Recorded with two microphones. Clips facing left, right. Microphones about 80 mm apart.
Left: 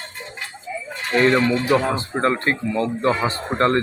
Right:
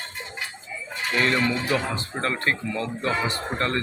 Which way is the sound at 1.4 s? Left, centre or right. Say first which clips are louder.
Left 6 dB; centre.